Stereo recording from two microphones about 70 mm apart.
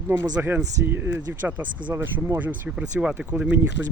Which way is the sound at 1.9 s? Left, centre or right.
Right.